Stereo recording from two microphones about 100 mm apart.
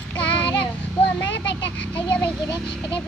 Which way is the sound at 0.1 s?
15° left (ahead or behind).